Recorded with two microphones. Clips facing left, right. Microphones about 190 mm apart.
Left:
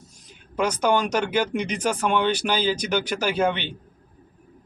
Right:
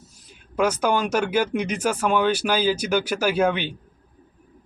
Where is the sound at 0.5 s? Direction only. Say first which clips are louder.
Even; 10° right (ahead or behind).